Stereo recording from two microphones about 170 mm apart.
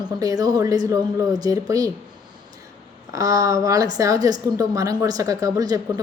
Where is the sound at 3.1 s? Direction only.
20° right (ahead or behind).